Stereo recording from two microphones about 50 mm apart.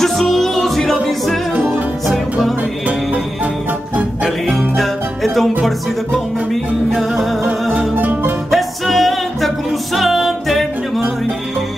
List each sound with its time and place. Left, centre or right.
0.0 s music: centre
4.6 s music: centre
6.9 s music: centre
7.9 s music: right
8.5 s music: centre